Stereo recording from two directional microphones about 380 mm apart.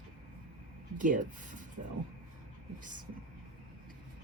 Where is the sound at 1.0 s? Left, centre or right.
Centre.